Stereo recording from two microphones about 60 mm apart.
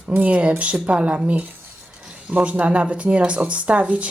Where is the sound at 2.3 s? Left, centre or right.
Right.